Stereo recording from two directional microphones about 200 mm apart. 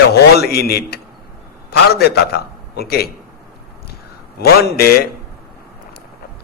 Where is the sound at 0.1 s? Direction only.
50° left (ahead or behind).